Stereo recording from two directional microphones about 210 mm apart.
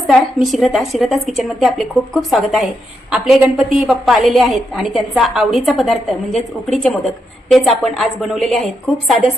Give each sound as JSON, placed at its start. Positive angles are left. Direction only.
{"t": 0.1, "sound": "a woman's voice", "side_deg": 0}